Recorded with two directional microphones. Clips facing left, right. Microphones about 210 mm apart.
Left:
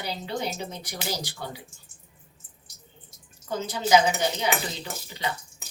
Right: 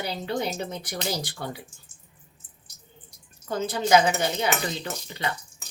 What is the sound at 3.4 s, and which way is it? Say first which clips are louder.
Speech: right 2 dB; 55° right (ahead or behind).